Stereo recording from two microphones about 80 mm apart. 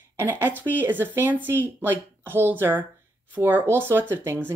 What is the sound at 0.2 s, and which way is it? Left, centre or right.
Speech, right.